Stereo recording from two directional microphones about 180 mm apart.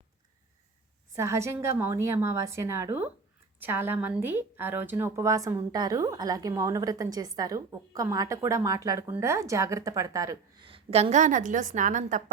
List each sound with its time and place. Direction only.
1.1 s a woman's voice: 15° right (ahead or behind)
10.7 s a woman's voice: 35° right (ahead or behind)